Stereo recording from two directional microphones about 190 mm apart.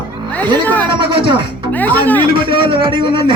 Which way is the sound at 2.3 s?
25° right (ahead or behind).